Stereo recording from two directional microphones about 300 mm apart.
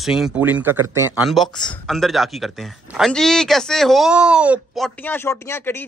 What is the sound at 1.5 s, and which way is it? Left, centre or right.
Speech, centre.